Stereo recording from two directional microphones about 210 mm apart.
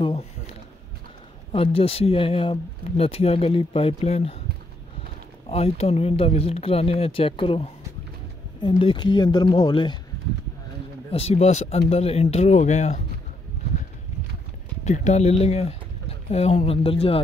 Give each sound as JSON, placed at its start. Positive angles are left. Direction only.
{"t": 1.5, "sound": "speech", "side_deg": 25}
{"t": 5.5, "sound": "speech", "side_deg": 30}
{"t": 11.1, "sound": "speech", "side_deg": 30}
{"t": 14.9, "sound": "speech", "side_deg": 35}